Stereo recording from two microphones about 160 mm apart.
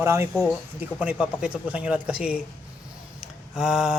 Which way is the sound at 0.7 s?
5° right (ahead or behind).